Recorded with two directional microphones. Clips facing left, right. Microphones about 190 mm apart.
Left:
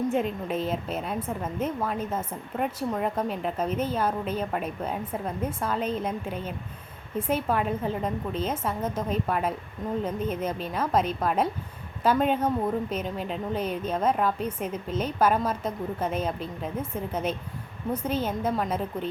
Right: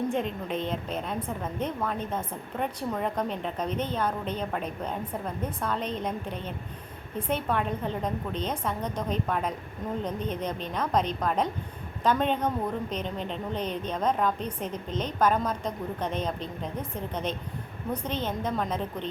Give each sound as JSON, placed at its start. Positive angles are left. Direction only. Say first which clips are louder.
{"t": 0.1, "sound": "a woman's voice", "louder": "left 2 dB", "side_deg": 5}